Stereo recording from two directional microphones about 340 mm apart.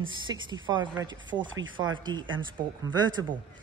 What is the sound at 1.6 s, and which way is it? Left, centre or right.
Speech, right.